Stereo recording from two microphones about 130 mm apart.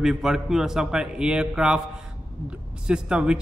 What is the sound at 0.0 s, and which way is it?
A man's voice, 5° right (ahead or behind).